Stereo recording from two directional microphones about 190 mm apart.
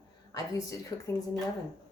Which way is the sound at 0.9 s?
20° left (ahead or behind).